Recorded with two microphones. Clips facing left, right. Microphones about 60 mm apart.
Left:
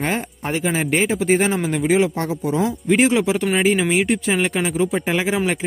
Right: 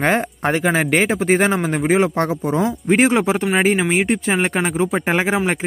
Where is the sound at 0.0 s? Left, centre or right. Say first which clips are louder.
Right 6 dB; right.